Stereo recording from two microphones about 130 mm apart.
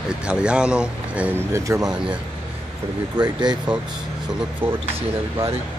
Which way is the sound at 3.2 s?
35° right (ahead or behind).